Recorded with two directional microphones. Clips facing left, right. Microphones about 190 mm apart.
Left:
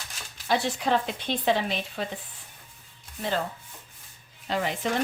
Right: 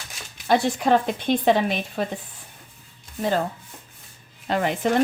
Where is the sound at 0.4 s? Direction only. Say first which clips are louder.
Right 6 dB; 50° right (ahead or behind).